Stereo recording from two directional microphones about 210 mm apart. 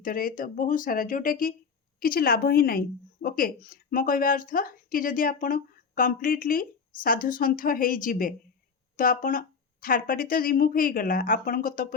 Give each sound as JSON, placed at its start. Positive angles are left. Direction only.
{"t": 0.0, "sound": "a woman's voice", "side_deg": 40}